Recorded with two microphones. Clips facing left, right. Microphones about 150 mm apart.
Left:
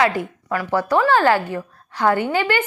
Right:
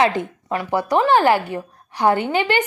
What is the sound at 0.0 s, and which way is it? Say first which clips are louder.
A woman's voice: right 1 dB; 20° right (ahead or behind).